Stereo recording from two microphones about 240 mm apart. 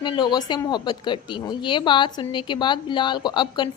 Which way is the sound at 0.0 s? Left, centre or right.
Centre.